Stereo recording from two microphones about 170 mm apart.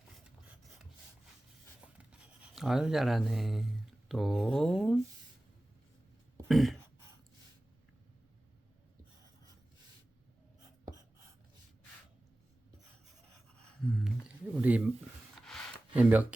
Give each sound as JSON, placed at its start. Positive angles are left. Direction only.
{"t": 0.3, "sound": "filing", "side_deg": -5}
{"t": 2.0, "sound": "speech", "side_deg": -5}
{"t": 6.5, "sound": "speech", "side_deg": 0}
{"t": 13.8, "sound": "a sound", "side_deg": 0}
{"t": 16.0, "sound": "speech", "side_deg": -10}